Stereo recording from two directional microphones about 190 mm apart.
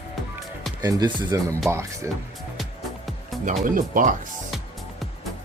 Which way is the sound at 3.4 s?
45° right (ahead or behind).